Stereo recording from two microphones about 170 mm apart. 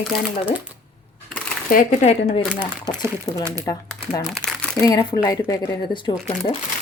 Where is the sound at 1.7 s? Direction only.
50° left (ahead or behind).